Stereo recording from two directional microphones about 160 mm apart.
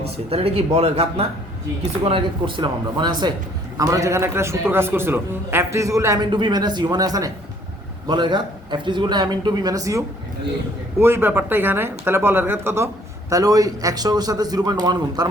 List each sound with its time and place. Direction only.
0.0 s a man's voice: 40° right (ahead or behind); by 10.0 s 20° right (ahead or behind)
11.0 s a man's voice: 15° right (ahead or behind)